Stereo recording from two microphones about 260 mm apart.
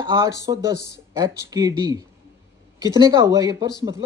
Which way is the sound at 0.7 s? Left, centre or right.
Left.